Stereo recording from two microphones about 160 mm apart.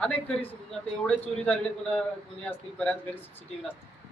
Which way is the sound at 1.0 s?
10° left (ahead or behind).